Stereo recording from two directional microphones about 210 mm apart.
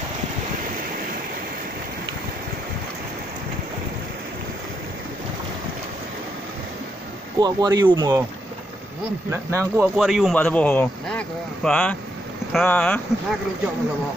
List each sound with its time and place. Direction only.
7.3 s speech: 20° right (ahead or behind)
9.3 s speech: 10° right (ahead or behind)
9.9 s speech: centre (ahead or behind)